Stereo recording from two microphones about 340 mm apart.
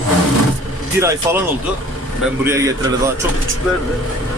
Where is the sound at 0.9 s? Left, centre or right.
Centre.